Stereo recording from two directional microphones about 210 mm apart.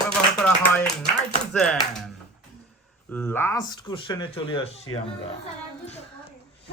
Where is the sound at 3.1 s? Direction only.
10° left (ahead or behind); by 4.8 s 25° left (ahead or behind).